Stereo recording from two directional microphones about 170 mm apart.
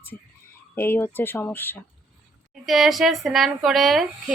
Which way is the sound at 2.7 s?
Centre (ahead or behind).